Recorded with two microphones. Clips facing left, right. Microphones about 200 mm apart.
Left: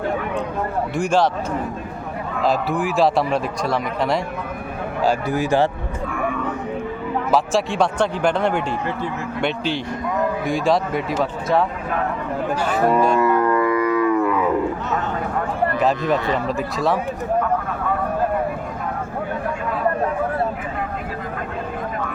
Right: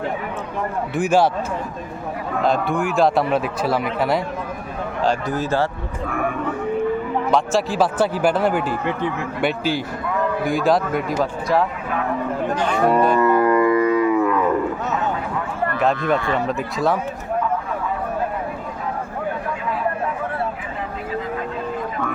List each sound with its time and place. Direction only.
0.9 s speech: 5° right (ahead or behind)
2.4 s speech: centre (ahead or behind)
5.0 s speech: 10° left (ahead or behind)
7.3 s speech: centre (ahead or behind)
13.4 s music: 20° right (ahead or behind)
14.2 s roaring cats: 5° left (ahead or behind)
16.5 s speech: centre (ahead or behind)